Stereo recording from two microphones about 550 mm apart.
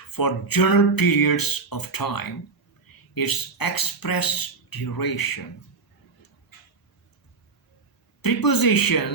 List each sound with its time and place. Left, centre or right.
0.1 s speech: left
8.2 s speech: left